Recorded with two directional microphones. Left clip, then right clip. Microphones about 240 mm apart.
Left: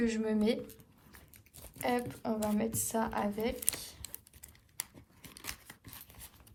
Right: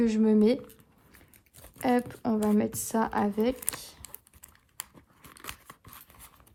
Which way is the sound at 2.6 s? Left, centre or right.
Right.